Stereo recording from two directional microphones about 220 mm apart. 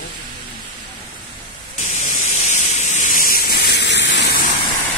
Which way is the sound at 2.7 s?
35° left (ahead or behind).